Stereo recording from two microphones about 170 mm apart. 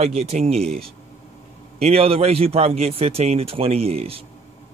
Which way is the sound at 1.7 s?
35° right (ahead or behind).